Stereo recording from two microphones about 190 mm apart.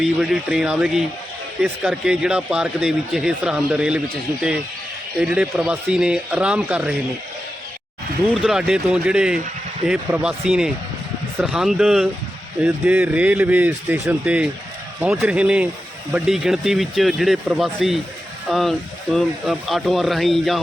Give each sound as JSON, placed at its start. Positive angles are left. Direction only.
{"t": 0.0, "sound": "a man's voice", "side_deg": -5}
{"t": 5.2, "sound": "a man's voice", "side_deg": -5}
{"t": 8.4, "sound": "a man's voice", "side_deg": -5}